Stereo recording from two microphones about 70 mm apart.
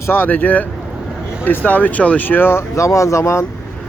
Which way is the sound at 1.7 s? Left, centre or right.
Left.